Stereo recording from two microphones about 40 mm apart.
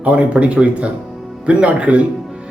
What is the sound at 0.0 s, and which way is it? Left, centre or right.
Speech, right.